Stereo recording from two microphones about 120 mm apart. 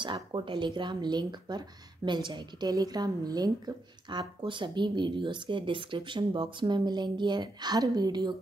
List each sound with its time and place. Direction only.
0.0 s a woman's voice: 40° right (ahead or behind)